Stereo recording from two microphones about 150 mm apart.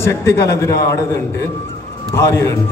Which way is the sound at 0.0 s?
15° left (ahead or behind).